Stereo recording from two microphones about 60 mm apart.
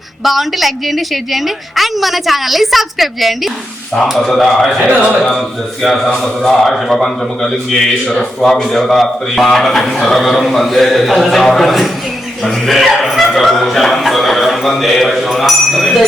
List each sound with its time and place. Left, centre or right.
0.2 s a man's voice: centre